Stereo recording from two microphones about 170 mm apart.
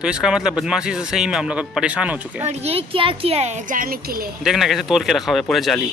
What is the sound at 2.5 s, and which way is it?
Speech, 35° right (ahead or behind).